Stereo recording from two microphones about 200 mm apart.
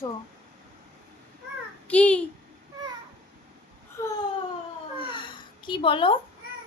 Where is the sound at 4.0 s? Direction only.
15° left (ahead or behind).